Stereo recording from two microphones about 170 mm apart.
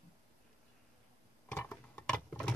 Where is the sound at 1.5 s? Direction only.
10° left (ahead or behind).